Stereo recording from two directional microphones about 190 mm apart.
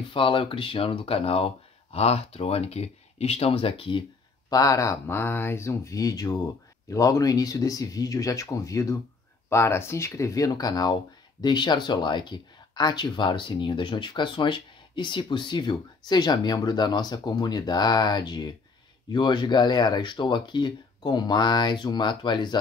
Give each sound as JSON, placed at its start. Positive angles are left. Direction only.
{"t": 0.1, "sound": "speech", "side_deg": 25}